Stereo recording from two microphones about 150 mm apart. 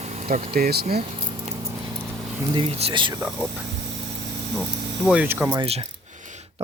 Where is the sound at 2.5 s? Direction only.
35° right (ahead or behind).